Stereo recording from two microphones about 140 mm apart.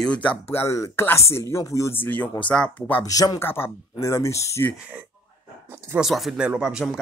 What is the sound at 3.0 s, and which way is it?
Speech, 25° left (ahead or behind).